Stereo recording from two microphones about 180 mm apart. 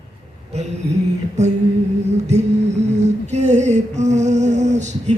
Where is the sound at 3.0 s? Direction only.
40° right (ahead or behind).